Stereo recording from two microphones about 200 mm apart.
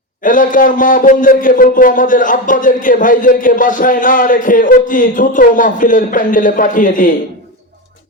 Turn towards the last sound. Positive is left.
turn(degrees=40)  # may be behind; listen again after turning